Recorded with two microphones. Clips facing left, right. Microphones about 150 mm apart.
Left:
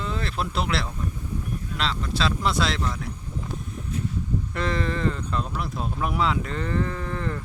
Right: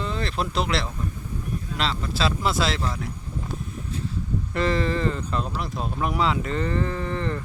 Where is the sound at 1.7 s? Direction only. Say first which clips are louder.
Even; centre (ahead or behind).